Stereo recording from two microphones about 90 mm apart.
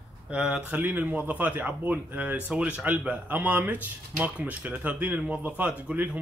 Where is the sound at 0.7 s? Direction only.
20° right (ahead or behind).